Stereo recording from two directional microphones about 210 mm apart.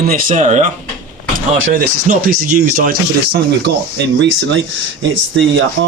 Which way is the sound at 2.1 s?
35° right (ahead or behind).